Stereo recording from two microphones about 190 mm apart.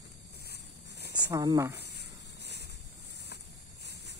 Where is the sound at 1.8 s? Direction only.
60° left (ahead or behind).